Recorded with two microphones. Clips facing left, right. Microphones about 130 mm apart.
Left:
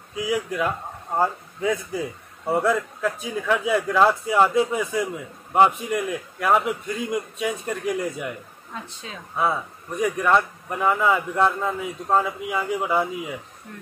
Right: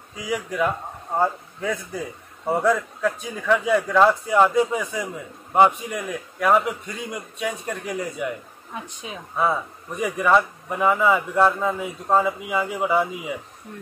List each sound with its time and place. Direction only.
0.1 s a man's voice: 5° left (ahead or behind)
8.7 s speech: 15° right (ahead or behind)
9.4 s a man's voice: centre (ahead or behind)